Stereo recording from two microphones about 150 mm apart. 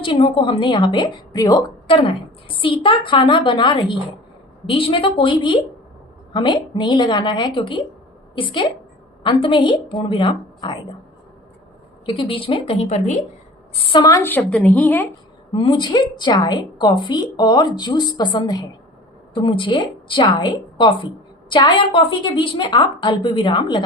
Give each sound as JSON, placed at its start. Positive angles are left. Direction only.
{"t": 0.0, "sound": "a woman's voice", "side_deg": 35}
{"t": 2.0, "sound": "a woman's voice", "side_deg": 35}
{"t": 12.0, "sound": "a woman's voice", "side_deg": 35}
{"t": 13.8, "sound": "a woman's voice", "side_deg": 30}
{"t": 15.5, "sound": "a woman's voice", "side_deg": 35}